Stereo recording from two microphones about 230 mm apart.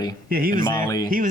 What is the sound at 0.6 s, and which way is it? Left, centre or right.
Speech, centre.